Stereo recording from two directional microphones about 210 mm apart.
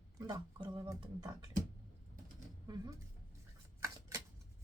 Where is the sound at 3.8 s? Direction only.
15° right (ahead or behind).